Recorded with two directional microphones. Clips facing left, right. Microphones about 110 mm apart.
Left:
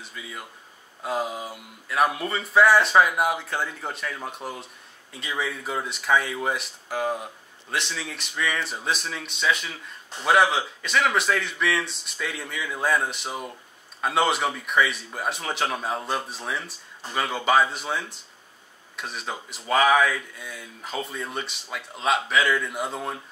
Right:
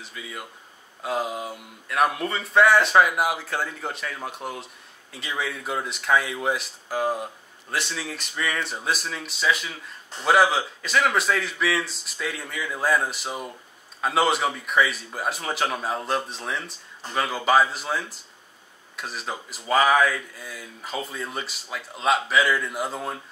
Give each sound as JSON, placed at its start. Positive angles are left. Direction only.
{"t": 0.0, "sound": "a man's voice", "side_deg": 0}